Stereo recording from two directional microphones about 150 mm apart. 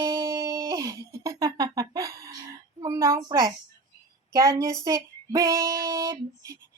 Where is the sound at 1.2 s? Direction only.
25° right (ahead or behind).